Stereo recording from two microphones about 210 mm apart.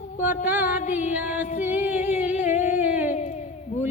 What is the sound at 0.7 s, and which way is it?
Female singing, 35° left (ahead or behind).